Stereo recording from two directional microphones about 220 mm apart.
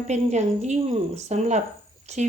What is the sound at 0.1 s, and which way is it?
Speech, 30° right (ahead or behind).